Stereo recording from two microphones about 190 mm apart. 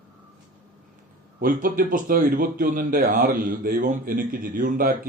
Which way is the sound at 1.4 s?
50° right (ahead or behind).